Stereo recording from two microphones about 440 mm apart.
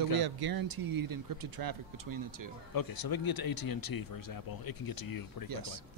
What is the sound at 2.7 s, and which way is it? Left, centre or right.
Speech, left.